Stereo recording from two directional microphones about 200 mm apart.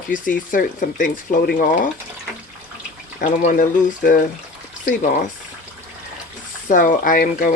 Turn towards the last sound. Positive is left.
turn(degrees=45)  # may be behind; listen again after turning